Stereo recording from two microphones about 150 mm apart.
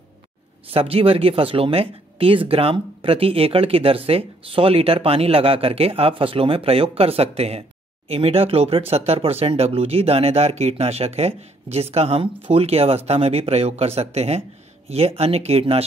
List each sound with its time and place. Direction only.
0.7 s speech: 40° right (ahead or behind)